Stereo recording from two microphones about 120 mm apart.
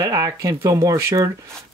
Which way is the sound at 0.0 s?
30° right (ahead or behind).